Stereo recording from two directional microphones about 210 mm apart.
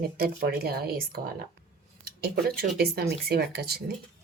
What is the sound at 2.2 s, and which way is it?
Speech, 50° right (ahead or behind).